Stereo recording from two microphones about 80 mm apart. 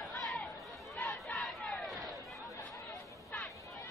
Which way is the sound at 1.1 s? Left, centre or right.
Centre.